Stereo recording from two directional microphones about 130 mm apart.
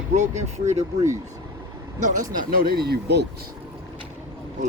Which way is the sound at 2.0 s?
90° right.